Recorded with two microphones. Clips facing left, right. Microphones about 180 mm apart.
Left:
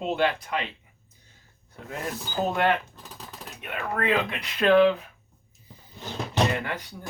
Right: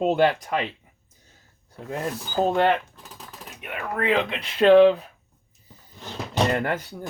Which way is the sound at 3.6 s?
20° right (ahead or behind).